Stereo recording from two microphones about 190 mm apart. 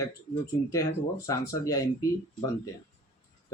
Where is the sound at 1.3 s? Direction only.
15° left (ahead or behind).